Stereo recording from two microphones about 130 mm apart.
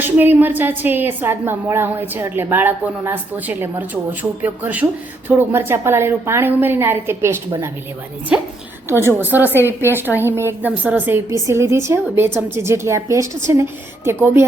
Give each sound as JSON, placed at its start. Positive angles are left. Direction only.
{"t": 0.0, "sound": "a woman's voice", "side_deg": -15}
{"t": 8.3, "sound": "a woman's voice", "side_deg": -5}
{"t": 8.9, "sound": "a woman's voice", "side_deg": -20}